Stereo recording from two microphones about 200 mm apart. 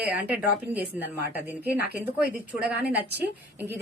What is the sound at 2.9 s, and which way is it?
Speech, 10° right (ahead or behind).